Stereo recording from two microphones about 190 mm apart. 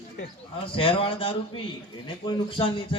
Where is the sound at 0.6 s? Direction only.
30° left (ahead or behind).